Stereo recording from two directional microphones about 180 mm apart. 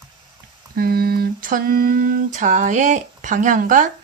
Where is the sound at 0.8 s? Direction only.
55° right (ahead or behind).